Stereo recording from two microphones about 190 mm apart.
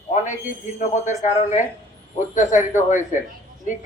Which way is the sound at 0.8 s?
40° left (ahead or behind).